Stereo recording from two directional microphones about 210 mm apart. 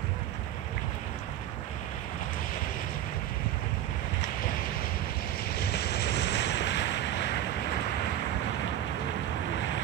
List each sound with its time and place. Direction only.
5.6 s vehicle: 50° left (ahead or behind)